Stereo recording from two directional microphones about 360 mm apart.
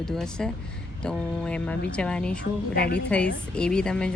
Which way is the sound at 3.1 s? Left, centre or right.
Centre.